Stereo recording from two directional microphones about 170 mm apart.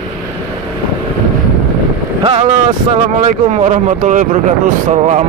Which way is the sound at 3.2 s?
40° right (ahead or behind).